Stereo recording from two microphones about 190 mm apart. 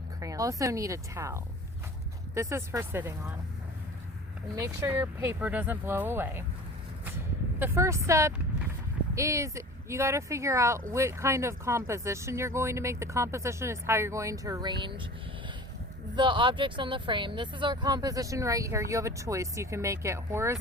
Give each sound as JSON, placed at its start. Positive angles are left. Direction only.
{"t": 0.2, "sound": "speech", "side_deg": -15}
{"t": 4.5, "sound": "speech", "side_deg": -15}
{"t": 7.6, "sound": "speech", "side_deg": -15}
{"t": 16.1, "sound": "speech", "side_deg": -25}